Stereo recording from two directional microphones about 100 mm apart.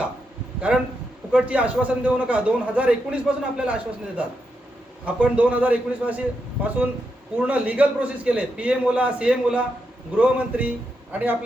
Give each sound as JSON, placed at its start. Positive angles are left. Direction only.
{"t": 0.7, "sound": "a man's voice", "side_deg": -5}
{"t": 5.0, "sound": "a man's voice", "side_deg": -15}
{"t": 7.3, "sound": "a man's voice", "side_deg": -15}